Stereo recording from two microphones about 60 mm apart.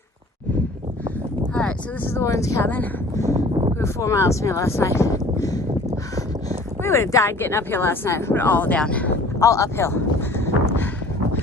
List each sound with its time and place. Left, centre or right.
2.0 s speech: left
3.8 s speech: left
6.8 s speech: left
7.3 s speech: left
8.4 s speech: left
9.4 s speech: left
9.7 s speech: left